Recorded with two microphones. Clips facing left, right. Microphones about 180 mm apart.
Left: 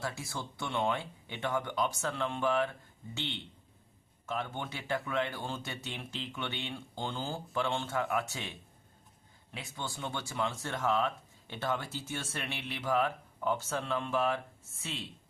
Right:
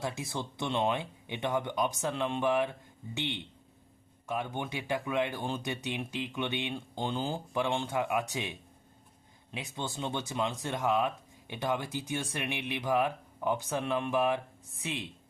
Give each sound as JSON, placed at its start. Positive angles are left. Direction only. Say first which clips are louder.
{"t": 0.0, "sound": "speech", "louder": "right 3 dB", "side_deg": -20}